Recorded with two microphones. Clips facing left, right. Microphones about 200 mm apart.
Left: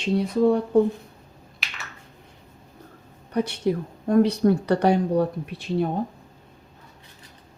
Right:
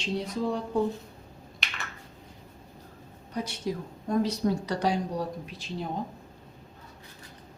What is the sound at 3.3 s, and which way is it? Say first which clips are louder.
A woman's voice: left 9 dB; 60° left (ahead or behind).